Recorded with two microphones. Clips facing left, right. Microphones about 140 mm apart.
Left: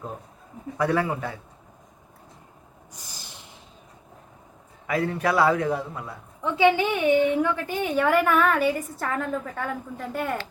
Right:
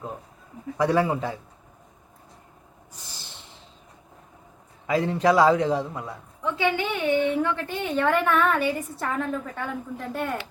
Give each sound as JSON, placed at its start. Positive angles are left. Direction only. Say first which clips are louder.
{"t": 0.8, "sound": "a man's voice", "louder": "right 2 dB", "side_deg": -20}
{"t": 4.9, "sound": "a man's voice", "louder": "right 3 dB", "side_deg": -25}
{"t": 6.4, "sound": "a woman's voice", "louder": "left 5 dB", "side_deg": 20}